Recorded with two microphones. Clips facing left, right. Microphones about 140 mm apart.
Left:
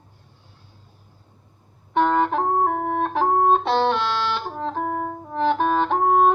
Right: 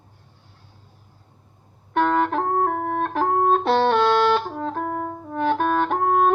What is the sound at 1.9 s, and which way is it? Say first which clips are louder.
Music: left 1 dB; 5° left (ahead or behind).